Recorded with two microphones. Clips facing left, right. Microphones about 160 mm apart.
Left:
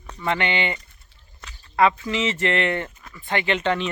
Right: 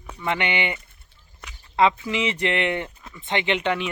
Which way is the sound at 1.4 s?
20° right (ahead or behind).